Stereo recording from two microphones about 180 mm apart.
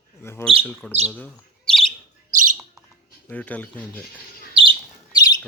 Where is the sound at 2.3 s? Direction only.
45° right (ahead or behind).